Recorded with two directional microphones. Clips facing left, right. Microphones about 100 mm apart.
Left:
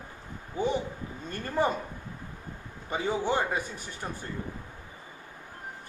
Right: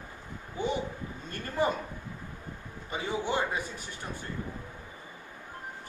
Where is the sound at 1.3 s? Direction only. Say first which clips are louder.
Left 2 dB; 35° left (ahead or behind).